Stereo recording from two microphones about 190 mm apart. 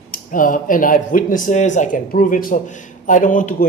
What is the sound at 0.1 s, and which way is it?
Speech, 45° left (ahead or behind).